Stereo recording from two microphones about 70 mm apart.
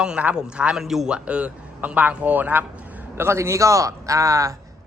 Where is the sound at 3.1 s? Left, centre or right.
Right.